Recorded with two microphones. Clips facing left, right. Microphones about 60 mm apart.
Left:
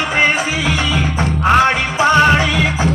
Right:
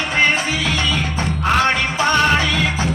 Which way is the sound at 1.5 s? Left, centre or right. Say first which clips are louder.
Left 3 dB; centre.